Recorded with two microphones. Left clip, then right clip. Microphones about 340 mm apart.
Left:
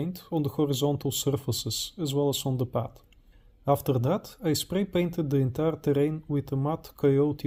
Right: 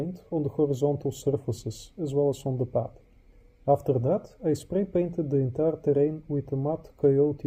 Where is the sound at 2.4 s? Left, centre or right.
Left.